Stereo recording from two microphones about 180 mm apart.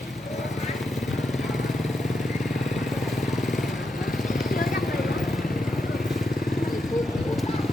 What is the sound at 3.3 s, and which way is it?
Vehicle, centre (ahead or behind).